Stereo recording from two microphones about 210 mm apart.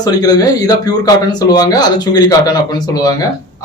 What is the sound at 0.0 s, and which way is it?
Speech, 20° left (ahead or behind).